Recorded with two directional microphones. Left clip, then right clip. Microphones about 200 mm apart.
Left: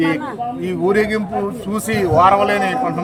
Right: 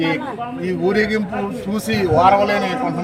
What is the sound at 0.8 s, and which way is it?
A man's voice, centre (ahead or behind).